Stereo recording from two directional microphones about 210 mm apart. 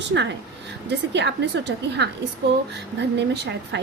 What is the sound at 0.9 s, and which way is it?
A woman's voice, 55° right (ahead or behind).